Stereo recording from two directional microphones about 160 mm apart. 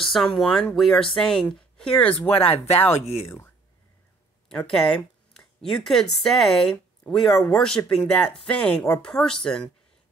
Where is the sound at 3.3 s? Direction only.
15° left (ahead or behind).